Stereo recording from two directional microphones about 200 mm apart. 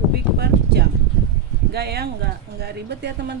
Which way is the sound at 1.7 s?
55° right (ahead or behind).